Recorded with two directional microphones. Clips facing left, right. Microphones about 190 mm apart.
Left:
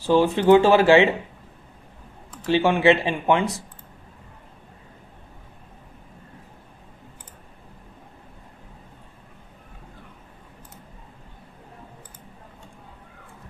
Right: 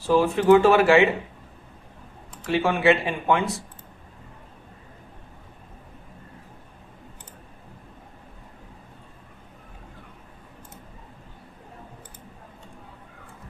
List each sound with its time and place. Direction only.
0.1 s speech: 25° left (ahead or behind)
2.5 s speech: 25° left (ahead or behind)